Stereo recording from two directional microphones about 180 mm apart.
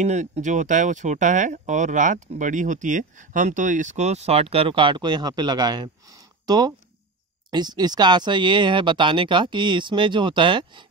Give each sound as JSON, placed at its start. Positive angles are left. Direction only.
{"t": 0.0, "sound": "speech", "side_deg": -40}